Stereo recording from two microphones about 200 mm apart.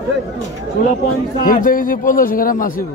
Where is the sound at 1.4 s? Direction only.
45° left (ahead or behind).